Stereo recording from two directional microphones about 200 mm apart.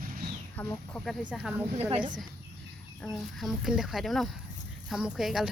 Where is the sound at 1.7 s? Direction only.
30° right (ahead or behind).